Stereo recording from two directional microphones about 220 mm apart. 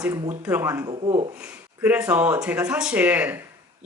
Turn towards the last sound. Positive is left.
turn(degrees=-10)  # may be behind; listen again after turning